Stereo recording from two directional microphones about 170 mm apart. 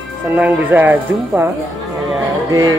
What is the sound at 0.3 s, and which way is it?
Speech, 10° right (ahead or behind).